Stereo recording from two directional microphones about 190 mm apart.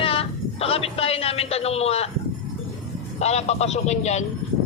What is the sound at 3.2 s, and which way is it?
Speech, 35° left (ahead or behind).